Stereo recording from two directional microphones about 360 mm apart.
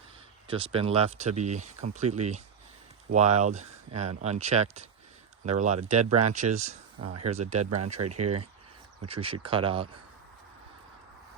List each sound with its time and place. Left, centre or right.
0.4 s speech: centre
8.2 s speech: right
9.0 s speech: centre